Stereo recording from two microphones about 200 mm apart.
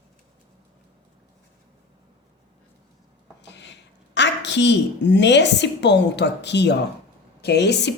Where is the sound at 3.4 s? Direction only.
60° left (ahead or behind).